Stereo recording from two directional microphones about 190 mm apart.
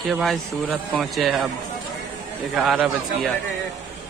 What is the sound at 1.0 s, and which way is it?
Speech, centre (ahead or behind).